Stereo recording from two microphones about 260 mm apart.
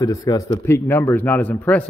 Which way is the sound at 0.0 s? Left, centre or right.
Centre.